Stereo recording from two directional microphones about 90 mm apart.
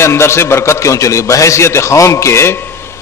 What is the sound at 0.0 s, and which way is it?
A man's voice, 30° left (ahead or behind).